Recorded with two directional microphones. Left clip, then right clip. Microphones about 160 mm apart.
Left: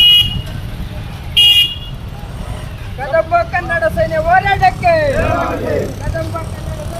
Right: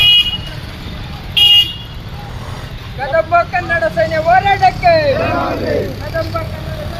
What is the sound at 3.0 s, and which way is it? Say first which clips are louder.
Vehicle: right 1 dB; 10° left (ahead or behind).